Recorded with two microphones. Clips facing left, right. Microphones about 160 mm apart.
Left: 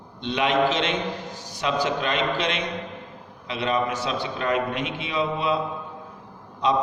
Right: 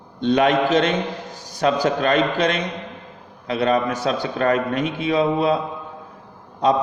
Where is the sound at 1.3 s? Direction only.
15° right (ahead or behind).